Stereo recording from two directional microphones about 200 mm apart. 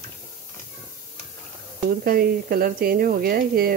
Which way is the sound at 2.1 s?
45° right (ahead or behind).